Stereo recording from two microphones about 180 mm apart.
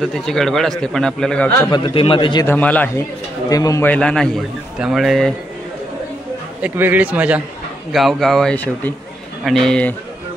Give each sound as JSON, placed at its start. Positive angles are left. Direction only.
{"t": 0.0, "sound": "a man's voice", "side_deg": 0}
{"t": 1.7, "sound": "a man's voice", "side_deg": 30}
{"t": 2.4, "sound": "a man's voice", "side_deg": 10}
{"t": 3.4, "sound": "a man's voice", "side_deg": 20}
{"t": 6.6, "sound": "a man's voice", "side_deg": -10}